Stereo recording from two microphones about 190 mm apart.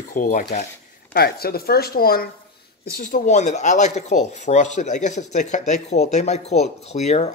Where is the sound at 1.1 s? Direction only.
55° left (ahead or behind).